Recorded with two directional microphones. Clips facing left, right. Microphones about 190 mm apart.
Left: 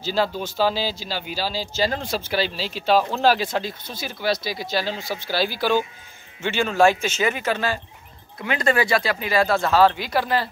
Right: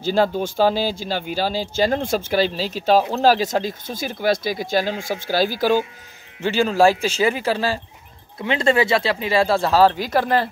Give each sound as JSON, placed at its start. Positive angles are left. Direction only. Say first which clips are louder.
{"t": 0.0, "sound": "speech", "louder": "right 5 dB", "side_deg": -50}